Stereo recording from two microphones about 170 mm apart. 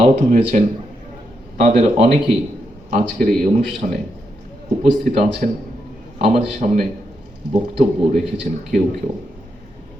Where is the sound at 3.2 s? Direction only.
55° right (ahead or behind).